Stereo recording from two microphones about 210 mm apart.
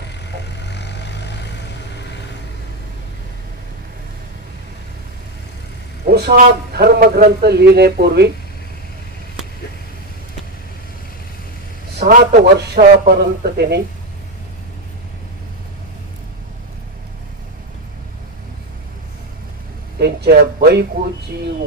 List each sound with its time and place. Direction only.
0.7 s vehicle: 55° left (ahead or behind)
6.0 s a man's voice: 45° right (ahead or behind)
12.0 s a man's voice: 40° right (ahead or behind)
20.0 s a man's voice: 50° right (ahead or behind)